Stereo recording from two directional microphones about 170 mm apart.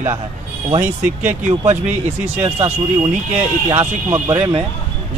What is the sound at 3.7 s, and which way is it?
Speech, 20° right (ahead or behind).